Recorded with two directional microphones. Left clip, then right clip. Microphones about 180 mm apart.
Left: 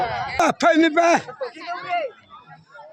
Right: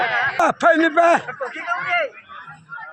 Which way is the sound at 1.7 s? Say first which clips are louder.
Right 5 dB; 70° left (ahead or behind).